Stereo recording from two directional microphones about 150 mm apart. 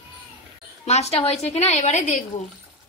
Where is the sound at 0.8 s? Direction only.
45° left (ahead or behind).